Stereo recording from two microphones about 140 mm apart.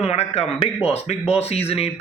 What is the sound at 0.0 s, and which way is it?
A man's voice, 50° left (ahead or behind).